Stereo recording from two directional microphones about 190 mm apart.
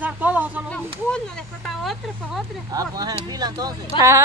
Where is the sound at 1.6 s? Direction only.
Centre (ahead or behind).